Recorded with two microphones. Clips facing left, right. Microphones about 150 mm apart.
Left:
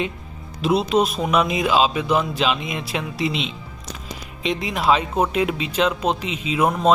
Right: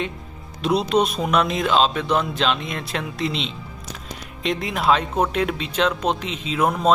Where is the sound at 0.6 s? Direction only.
Centre (ahead or behind).